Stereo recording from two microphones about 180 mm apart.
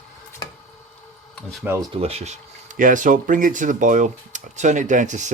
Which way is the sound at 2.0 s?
35° right (ahead or behind).